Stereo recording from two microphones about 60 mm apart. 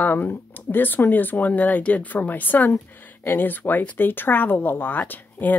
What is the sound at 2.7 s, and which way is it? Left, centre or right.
Speech, left.